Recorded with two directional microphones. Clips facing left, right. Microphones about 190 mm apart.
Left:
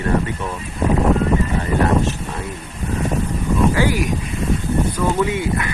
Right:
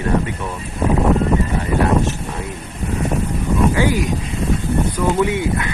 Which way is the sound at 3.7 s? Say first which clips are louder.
Right 1 dB; 20° right (ahead or behind).